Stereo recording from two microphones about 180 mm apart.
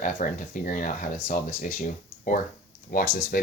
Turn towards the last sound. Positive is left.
turn(degrees=50)  # may be behind; listen again after turning